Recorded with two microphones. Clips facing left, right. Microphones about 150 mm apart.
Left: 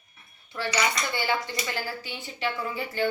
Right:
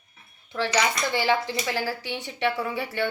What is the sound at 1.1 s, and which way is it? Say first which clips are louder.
A woman's voice: right 5 dB; 90° right.